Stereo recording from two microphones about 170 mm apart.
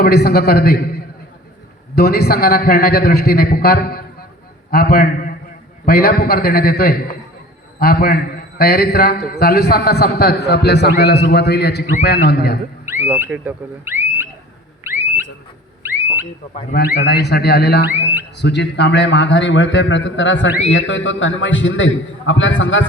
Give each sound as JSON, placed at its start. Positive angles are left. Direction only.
{"t": 0.0, "sound": "a man's voice", "side_deg": 65}
{"t": 12.8, "sound": "speech", "side_deg": -15}
{"t": 14.8, "sound": "a sound", "side_deg": -15}
{"t": 17.0, "sound": "speech", "side_deg": 75}
{"t": 17.8, "sound": "speech", "side_deg": -10}
{"t": 18.3, "sound": "a man's voice", "side_deg": 90}